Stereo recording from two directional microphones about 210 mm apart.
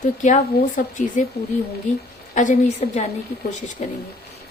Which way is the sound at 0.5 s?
45° left (ahead or behind).